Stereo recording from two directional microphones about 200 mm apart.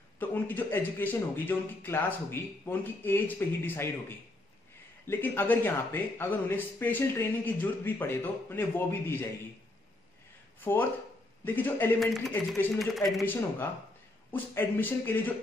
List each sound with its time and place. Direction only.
0.2 s speech: 10° left (ahead or behind)
5.0 s speech: 10° left (ahead or behind)
10.6 s speech: 10° left (ahead or behind)
13.2 s speech: 10° left (ahead or behind)